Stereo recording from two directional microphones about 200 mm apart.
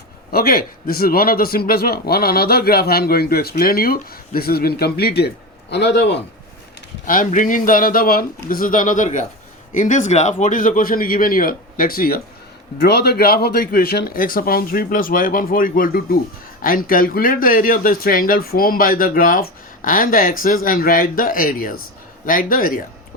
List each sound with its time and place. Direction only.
0.3 s a man's voice: 50° left (ahead or behind)
7.0 s speech: 40° left (ahead or behind)